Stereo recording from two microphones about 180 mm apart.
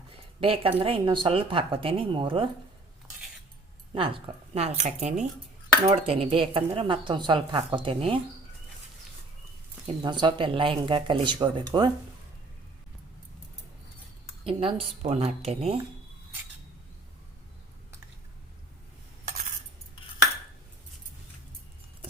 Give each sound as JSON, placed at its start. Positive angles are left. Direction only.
{"t": 0.3, "sound": "a woman's voice", "side_deg": -30}
{"t": 3.9, "sound": "speech", "side_deg": -30}
{"t": 9.8, "sound": "speech", "side_deg": -25}
{"t": 14.4, "sound": "speech", "side_deg": -30}